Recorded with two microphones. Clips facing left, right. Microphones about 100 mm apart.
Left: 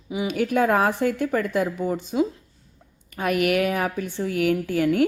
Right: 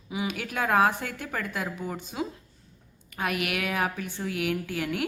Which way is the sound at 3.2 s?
40° left (ahead or behind).